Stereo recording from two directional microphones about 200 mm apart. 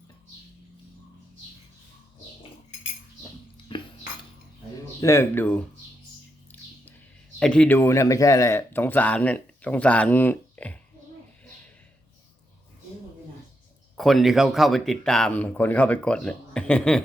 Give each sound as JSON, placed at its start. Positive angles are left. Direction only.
{"t": 3.7, "sound": "cutlery", "side_deg": 25}
{"t": 4.9, "sound": "speech", "side_deg": 15}
{"t": 7.3, "sound": "speech", "side_deg": 5}
{"t": 13.9, "sound": "speech", "side_deg": 0}